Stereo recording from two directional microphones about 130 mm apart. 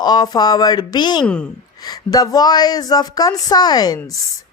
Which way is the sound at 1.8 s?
30° left (ahead or behind).